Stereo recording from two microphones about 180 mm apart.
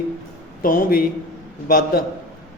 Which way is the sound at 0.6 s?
50° left (ahead or behind).